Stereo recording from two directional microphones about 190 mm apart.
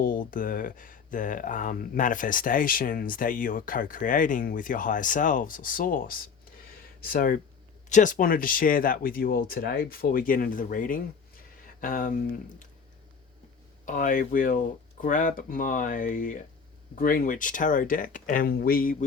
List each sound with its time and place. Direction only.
0.0 s speech: 45° left (ahead or behind)
13.8 s speech: 45° left (ahead or behind)